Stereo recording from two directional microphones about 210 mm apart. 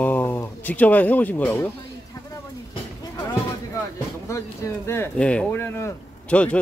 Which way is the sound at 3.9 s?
15° left (ahead or behind).